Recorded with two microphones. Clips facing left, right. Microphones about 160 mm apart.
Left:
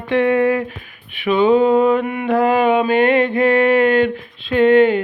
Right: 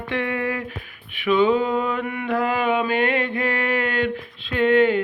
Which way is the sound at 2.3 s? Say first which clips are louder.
Left 7 dB; 25° left (ahead or behind).